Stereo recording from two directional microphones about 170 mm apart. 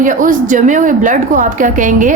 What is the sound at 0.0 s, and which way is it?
A woman's voice, 50° right (ahead or behind).